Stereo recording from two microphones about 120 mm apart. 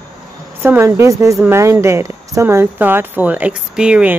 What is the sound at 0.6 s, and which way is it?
Speech, 20° right (ahead or behind).